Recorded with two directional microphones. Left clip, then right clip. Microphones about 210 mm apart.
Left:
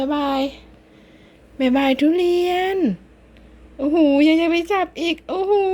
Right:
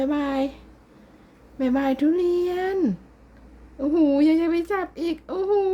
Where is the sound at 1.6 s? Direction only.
10° left (ahead or behind).